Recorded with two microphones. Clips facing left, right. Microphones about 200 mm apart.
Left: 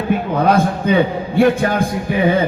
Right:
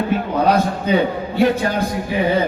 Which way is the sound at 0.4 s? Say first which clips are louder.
Left 3 dB; 50° left (ahead or behind).